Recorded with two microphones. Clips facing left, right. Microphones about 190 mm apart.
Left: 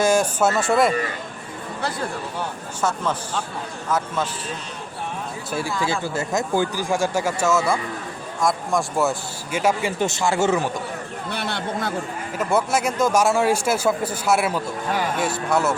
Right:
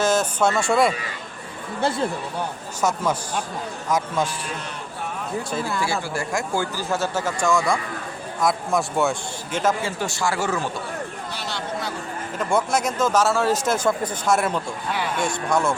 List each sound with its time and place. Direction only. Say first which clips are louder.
0.0 s speech: left 2 dB; 10° left (ahead or behind)
2.8 s a man's voice: right 1 dB; 10° right (ahead or behind)
5.8 s speech: left 1 dB; 20° left (ahead or behind)
11.3 s speech: left 7 dB; 60° left (ahead or behind)
12.4 s speech: left 1 dB; 5° left (ahead or behind)
14.8 s speech: left 4 dB; 45° left (ahead or behind)
15.2 s speech: right 1 dB; 5° left (ahead or behind)